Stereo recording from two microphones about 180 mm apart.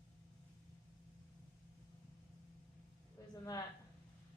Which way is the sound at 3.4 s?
20° left (ahead or behind).